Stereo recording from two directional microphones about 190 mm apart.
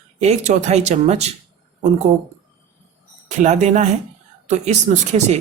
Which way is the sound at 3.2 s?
40° right (ahead or behind).